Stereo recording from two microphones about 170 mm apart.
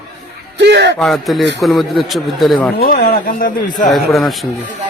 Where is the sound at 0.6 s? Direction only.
85° right.